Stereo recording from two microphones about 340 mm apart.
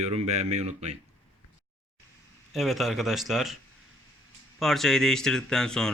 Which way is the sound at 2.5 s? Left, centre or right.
Centre.